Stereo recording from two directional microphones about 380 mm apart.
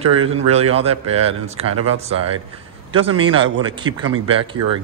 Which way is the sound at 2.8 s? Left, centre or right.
Centre.